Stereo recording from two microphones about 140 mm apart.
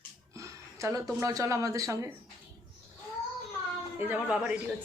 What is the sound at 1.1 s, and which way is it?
Speech, 25° right (ahead or behind).